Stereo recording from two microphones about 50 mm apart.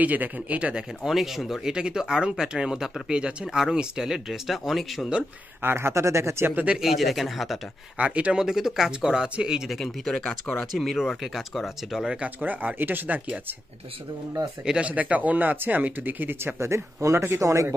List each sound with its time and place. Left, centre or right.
0.0 s speech: right
0.7 s speech: centre
1.7 s speech: centre
5.6 s speech: right
6.4 s speech: right
6.8 s speech: centre
8.0 s speech: right
8.5 s speech: centre
9.8 s speech: centre
12.4 s speech: right
14.6 s speech: right
16.5 s speech: right